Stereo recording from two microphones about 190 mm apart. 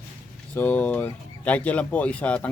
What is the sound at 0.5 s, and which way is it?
Speech, 10° left (ahead or behind).